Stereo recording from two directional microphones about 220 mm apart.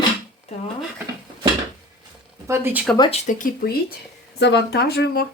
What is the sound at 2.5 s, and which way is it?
Speech, 10° right (ahead or behind).